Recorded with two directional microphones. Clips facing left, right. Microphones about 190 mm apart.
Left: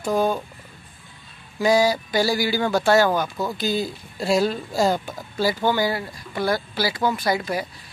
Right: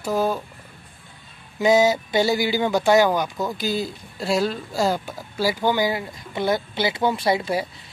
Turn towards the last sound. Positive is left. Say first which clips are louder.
# right 2 dB
turn(degrees=-25)  # may be behind; listen again after turning